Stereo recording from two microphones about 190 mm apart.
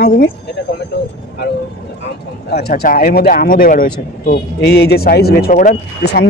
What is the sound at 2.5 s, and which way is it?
Speech, 55° left (ahead or behind).